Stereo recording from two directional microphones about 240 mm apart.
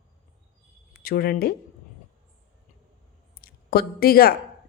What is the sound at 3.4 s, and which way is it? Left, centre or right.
Speech, left.